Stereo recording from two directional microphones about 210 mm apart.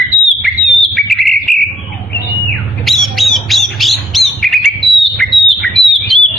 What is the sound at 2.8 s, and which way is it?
Squawk, centre (ahead or behind).